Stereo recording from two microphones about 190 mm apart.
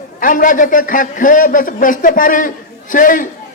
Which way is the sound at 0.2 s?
45° left (ahead or behind).